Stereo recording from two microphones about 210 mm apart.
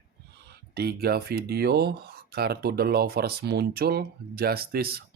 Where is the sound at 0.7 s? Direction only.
50° right (ahead or behind).